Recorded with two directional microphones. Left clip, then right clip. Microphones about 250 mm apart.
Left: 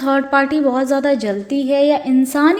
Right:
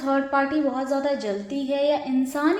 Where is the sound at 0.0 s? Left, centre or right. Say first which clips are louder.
Left 7 dB; left.